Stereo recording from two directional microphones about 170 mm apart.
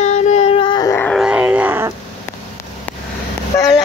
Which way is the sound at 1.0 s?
5° left (ahead or behind).